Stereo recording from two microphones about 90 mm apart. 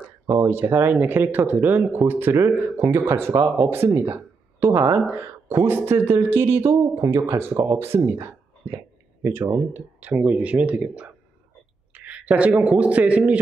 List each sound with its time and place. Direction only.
0.5 s speech: 25° right (ahead or behind)
3.3 s speech: 40° right (ahead or behind)
3.7 s a man's voice: 30° right (ahead or behind)